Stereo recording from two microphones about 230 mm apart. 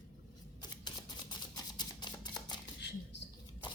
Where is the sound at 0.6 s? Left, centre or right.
Centre.